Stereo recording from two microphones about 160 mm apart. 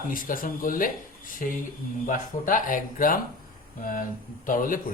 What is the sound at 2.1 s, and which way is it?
Speech, 55° left (ahead or behind).